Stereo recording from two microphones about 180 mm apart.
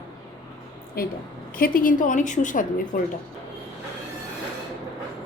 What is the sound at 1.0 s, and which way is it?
A woman's voice, 55° left (ahead or behind).